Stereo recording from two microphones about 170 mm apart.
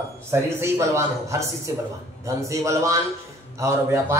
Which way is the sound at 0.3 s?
15° right (ahead or behind).